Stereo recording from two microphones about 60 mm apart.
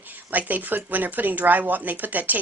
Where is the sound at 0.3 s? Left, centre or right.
Right.